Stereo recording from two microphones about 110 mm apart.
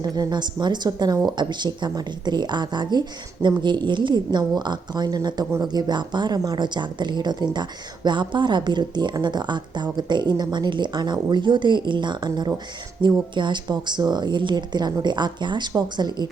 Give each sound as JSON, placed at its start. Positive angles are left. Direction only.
{"t": 0.0, "sound": "speech", "side_deg": -40}